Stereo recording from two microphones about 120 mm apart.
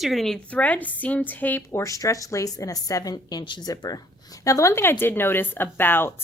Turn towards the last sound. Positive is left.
turn(degrees=15)  # may be behind; listen again after turning